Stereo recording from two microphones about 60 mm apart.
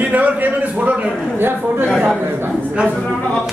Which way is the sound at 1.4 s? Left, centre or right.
Right.